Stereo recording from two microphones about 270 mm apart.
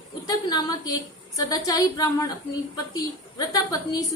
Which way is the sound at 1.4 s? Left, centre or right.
Centre.